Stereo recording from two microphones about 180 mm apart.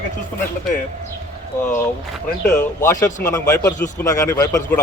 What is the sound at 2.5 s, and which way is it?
Speech, 15° left (ahead or behind).